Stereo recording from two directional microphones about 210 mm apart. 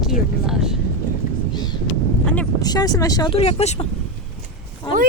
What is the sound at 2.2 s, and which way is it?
Vehicle, 5° left (ahead or behind).